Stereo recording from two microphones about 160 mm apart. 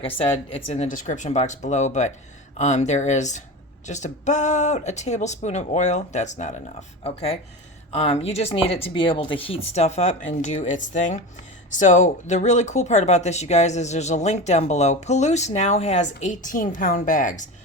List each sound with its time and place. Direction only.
0.0 s speech: 35° left (ahead or behind); by 17.5 s 50° left (ahead or behind)